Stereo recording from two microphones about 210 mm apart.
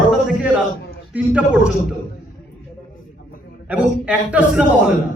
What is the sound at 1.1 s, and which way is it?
Speech, 5° right (ahead or behind).